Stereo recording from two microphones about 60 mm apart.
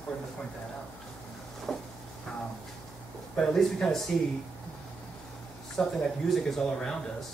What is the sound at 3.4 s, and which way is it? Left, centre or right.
Speech, centre.